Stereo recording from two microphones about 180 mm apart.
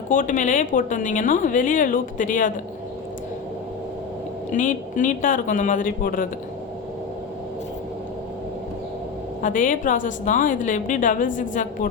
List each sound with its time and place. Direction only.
0.1 s a woman's voice: 45° left (ahead or behind)
4.5 s a woman's voice: 45° left (ahead or behind)
9.4 s a woman's voice: 45° left (ahead or behind)